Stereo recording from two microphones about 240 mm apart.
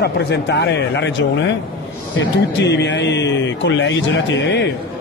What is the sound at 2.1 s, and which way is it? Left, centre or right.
Speech, left.